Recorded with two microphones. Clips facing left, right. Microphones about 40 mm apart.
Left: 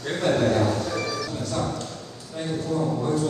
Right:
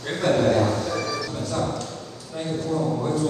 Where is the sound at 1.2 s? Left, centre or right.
Right.